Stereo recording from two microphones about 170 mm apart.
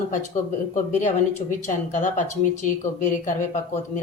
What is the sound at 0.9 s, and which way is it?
Speech, 45° left (ahead or behind).